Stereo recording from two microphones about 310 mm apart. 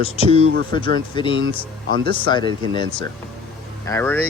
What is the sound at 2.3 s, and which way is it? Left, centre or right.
Speech, centre.